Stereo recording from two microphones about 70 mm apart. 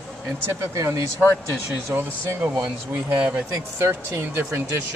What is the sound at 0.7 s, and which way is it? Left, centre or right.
Speech, right.